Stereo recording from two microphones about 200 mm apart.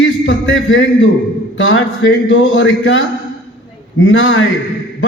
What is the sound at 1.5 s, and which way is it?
A man's voice, 70° left (ahead or behind).